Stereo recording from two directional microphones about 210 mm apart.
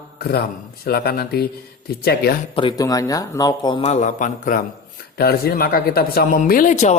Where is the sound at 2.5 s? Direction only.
25° left (ahead or behind).